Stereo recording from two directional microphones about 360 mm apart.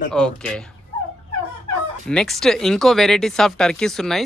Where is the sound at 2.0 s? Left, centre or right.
Centre.